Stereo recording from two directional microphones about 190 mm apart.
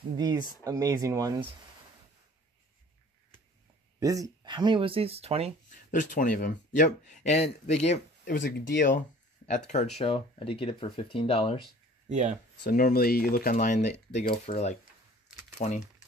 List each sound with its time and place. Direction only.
0.1 s speech: 20° right (ahead or behind)
4.0 s speech: 20° right (ahead or behind)
5.9 s speech: 45° left (ahead or behind)
8.4 s speech: 65° left (ahead or behind)
9.9 s speech: 30° left (ahead or behind)
12.1 s speech: 40° right (ahead or behind)
12.6 s speech: 50° left (ahead or behind)